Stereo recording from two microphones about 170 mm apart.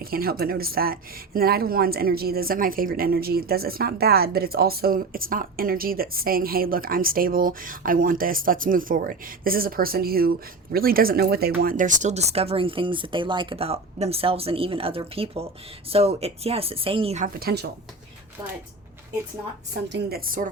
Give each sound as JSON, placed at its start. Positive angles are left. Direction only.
{"t": 0.0, "sound": "speech", "side_deg": -60}
{"t": 17.4, "sound": "speech", "side_deg": -75}
{"t": 19.9, "sound": "speech", "side_deg": -65}